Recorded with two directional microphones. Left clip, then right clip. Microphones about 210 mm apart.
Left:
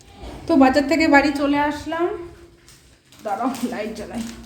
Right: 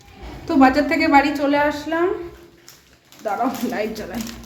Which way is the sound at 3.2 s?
Centre (ahead or behind).